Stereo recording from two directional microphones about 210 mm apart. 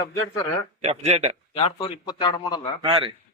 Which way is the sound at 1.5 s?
25° left (ahead or behind).